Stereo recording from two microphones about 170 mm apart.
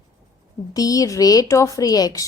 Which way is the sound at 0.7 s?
20° left (ahead or behind).